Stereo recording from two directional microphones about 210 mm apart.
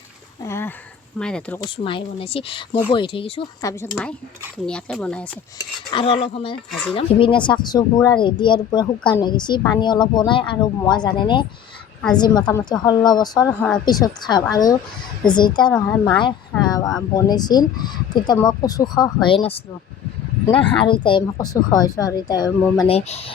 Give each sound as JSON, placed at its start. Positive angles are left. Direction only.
{"t": 0.4, "sound": "dog", "side_deg": 10}
{"t": 1.2, "sound": "speech", "side_deg": 5}
{"t": 1.6, "sound": "a woman's voice", "side_deg": 25}
{"t": 4.5, "sound": "speech", "side_deg": 5}
{"t": 5.9, "sound": "a woman's voice", "side_deg": 25}
{"t": 6.7, "sound": "speech", "side_deg": 0}
{"t": 6.9, "sound": "a woman's voice", "side_deg": 25}
{"t": 15.7, "sound": "speech", "side_deg": 5}
{"t": 16.1, "sound": "a woman's voice", "side_deg": 20}
{"t": 20.7, "sound": "a woman's voice", "side_deg": 25}
{"t": 23.0, "sound": "a woman's voice", "side_deg": 30}